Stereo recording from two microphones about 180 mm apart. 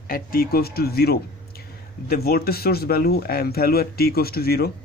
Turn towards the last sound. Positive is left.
turn(degrees=60)  # may be behind; listen again after turning